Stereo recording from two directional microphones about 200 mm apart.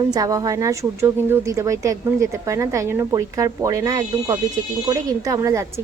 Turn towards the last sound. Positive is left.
turn(degrees=-15)  # may be behind; listen again after turning